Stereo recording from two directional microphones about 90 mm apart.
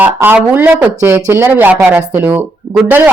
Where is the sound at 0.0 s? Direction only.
20° right (ahead or behind).